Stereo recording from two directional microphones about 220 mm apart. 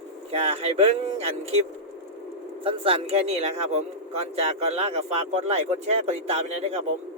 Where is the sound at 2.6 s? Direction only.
25° right (ahead or behind).